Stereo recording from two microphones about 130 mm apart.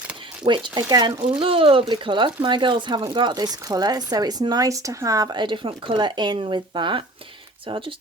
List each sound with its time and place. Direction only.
0.4 s speech: 35° right (ahead or behind)
1.4 s speech: 45° right (ahead or behind)